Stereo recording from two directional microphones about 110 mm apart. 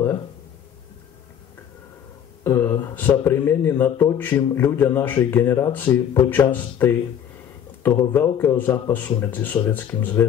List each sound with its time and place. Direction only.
2.4 s speech: 20° left (ahead or behind)